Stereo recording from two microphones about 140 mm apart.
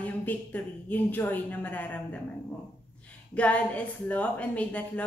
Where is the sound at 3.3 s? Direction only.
10° left (ahead or behind).